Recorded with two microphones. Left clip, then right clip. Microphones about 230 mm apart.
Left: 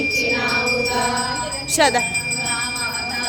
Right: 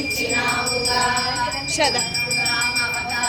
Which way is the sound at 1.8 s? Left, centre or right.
Left.